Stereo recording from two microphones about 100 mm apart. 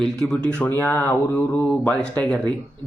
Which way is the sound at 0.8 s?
20° left (ahead or behind).